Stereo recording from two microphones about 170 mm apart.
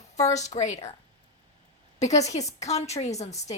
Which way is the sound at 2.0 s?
45° left (ahead or behind).